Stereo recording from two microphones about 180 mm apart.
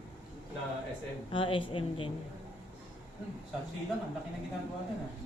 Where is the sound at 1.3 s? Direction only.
30° left (ahead or behind).